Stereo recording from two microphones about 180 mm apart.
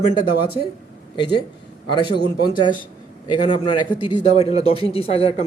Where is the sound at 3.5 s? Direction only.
25° left (ahead or behind).